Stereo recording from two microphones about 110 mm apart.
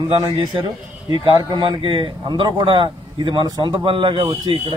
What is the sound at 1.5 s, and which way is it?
A man's voice, 50° right (ahead or behind).